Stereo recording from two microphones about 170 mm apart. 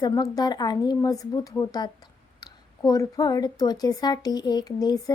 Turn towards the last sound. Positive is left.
turn(degrees=20)  # may be behind; listen again after turning